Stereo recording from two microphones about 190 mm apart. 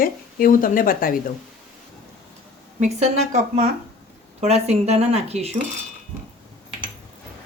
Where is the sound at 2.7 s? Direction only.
35° right (ahead or behind).